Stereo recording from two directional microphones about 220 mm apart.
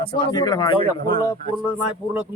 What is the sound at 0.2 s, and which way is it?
Speech, 20° left (ahead or behind).